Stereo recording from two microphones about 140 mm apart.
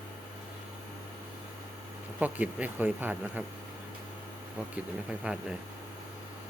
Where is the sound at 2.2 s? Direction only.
10° right (ahead or behind).